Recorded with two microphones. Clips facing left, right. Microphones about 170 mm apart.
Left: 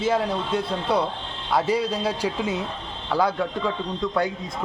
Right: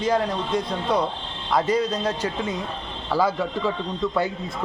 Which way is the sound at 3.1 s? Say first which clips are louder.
Even; 5° right (ahead or behind).